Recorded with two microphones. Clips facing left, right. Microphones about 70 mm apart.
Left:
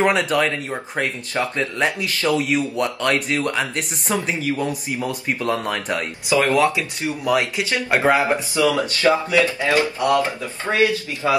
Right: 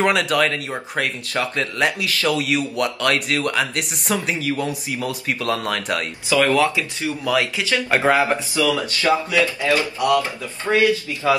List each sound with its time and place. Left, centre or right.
0.0 s speech: left